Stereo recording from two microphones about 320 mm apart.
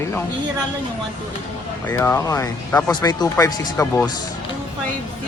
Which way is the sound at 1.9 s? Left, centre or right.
Centre.